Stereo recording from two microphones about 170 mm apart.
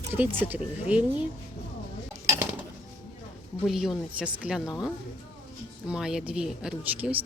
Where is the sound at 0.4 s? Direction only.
10° right (ahead or behind).